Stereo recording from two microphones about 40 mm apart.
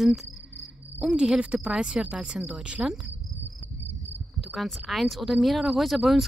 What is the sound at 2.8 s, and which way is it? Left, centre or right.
Insect, right.